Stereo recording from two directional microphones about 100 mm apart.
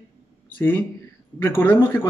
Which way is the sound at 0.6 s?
15° left (ahead or behind).